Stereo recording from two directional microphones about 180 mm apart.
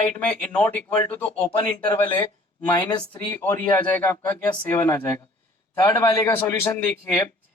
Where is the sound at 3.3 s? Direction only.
15° left (ahead or behind).